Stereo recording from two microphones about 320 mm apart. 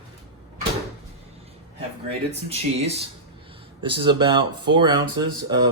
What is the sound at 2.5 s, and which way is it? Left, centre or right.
Speech, centre.